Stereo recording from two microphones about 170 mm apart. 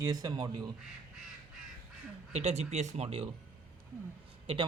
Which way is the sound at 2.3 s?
35° right (ahead or behind).